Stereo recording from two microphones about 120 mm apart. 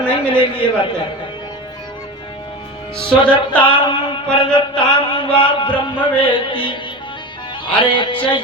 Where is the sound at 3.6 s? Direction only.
40° left (ahead or behind).